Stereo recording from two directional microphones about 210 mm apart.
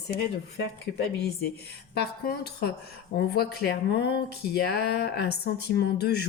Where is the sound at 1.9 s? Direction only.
50° left (ahead or behind).